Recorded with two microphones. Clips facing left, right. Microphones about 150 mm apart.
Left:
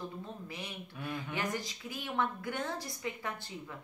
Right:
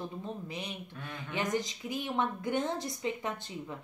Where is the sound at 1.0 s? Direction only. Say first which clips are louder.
Left 8 dB; 10° left (ahead or behind).